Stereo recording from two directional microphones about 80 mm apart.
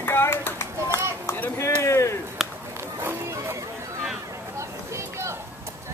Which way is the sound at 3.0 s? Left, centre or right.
Right.